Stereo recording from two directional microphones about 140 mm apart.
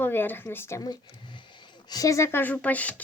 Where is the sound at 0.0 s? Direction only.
15° left (ahead or behind).